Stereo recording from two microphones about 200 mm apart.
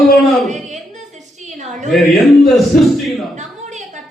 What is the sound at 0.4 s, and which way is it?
Speech, 35° right (ahead or behind).